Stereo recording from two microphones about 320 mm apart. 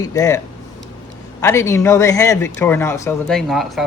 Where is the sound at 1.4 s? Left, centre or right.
Centre.